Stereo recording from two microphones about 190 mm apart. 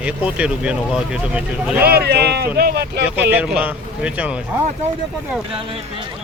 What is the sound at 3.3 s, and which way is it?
Speech, 5° right (ahead or behind).